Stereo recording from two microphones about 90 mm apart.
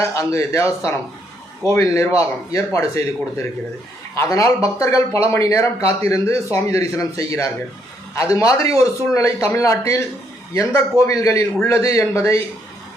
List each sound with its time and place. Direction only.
0.0 s a man's voice: 35° left (ahead or behind)